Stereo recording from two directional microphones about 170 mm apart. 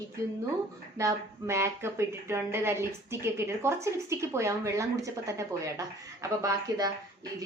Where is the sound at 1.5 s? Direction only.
15° right (ahead or behind).